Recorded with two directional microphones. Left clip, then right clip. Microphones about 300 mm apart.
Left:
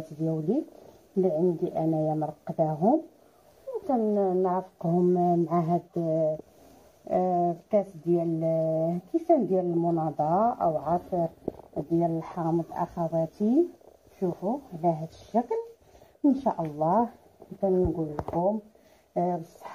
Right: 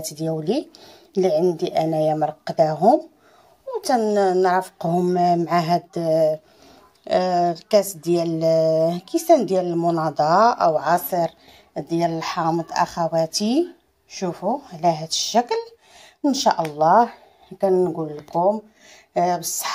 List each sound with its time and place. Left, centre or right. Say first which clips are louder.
0.2 s a woman's voice: right 5 dB; right